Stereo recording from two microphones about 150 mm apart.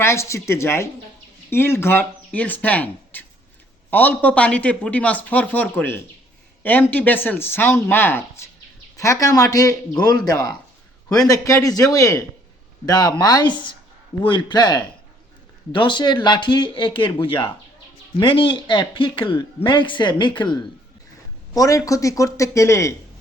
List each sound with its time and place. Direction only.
0.0 s a man's voice: 20° left (ahead or behind)